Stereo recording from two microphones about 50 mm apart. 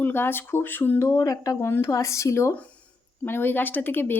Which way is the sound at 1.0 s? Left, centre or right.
Left.